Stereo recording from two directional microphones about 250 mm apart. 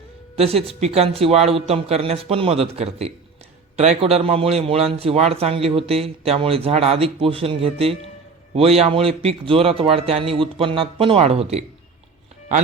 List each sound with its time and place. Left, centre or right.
0.3 s a man's voice: right